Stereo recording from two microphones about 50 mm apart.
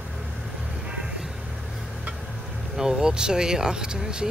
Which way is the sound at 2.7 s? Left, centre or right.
Centre.